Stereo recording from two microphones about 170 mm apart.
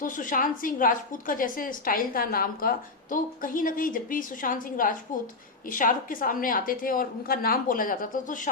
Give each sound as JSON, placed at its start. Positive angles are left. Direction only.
{"t": 0.0, "sound": "a woman's voice", "side_deg": 55}